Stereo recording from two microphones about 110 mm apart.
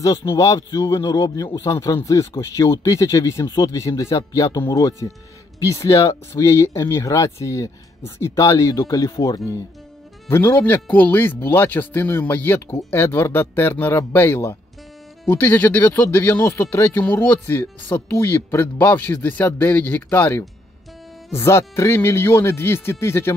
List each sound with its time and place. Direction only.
0.0 s speech: 35° left (ahead or behind)
0.9 s speech: 40° left (ahead or behind)
10.3 s speech: 20° left (ahead or behind)